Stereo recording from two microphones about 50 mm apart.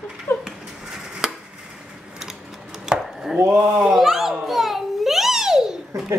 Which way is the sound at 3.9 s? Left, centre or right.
Centre.